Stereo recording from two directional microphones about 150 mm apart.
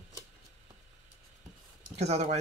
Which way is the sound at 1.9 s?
45° right (ahead or behind).